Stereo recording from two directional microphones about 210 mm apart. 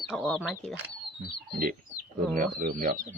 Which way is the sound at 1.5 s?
40° right (ahead or behind).